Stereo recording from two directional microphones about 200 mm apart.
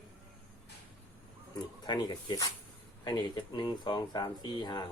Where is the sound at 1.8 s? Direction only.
20° left (ahead or behind).